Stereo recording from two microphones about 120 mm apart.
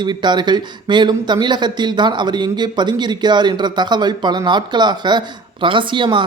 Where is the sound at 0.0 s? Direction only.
40° right (ahead or behind).